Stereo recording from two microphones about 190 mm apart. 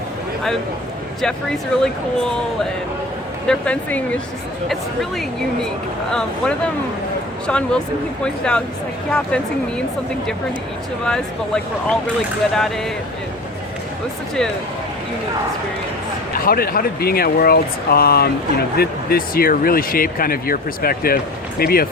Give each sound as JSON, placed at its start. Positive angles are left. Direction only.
{"t": 1.2, "sound": "speech", "side_deg": 5}
{"t": 3.4, "sound": "speech", "side_deg": 5}
{"t": 11.0, "sound": "speech", "side_deg": 5}
{"t": 16.5, "sound": "speech", "side_deg": 50}